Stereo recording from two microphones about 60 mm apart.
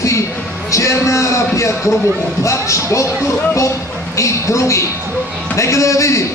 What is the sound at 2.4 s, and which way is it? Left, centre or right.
Speech, left.